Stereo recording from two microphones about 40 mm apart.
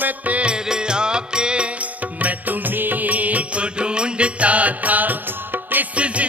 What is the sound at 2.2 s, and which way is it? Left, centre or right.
Music, right.